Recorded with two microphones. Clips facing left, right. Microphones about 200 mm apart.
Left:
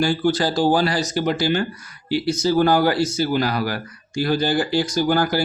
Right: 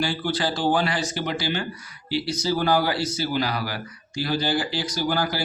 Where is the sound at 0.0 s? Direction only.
45° left (ahead or behind).